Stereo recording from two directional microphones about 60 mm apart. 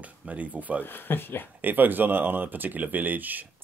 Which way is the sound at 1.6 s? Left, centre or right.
Right.